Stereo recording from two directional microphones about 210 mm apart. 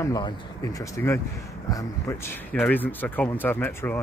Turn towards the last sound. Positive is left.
turn(degrees=10)  # may be behind; listen again after turning